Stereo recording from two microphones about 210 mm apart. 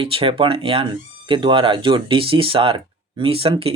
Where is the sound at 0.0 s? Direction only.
25° right (ahead or behind).